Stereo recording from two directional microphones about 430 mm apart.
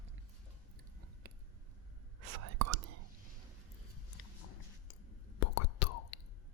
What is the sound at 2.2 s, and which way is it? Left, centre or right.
Whispering, right.